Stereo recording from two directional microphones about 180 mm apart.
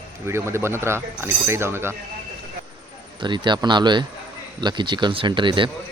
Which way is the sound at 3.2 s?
25° right (ahead or behind).